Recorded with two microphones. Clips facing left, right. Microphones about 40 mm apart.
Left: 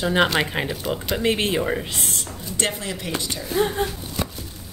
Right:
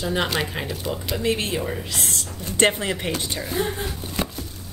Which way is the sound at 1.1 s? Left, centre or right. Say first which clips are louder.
Left 3 dB; left.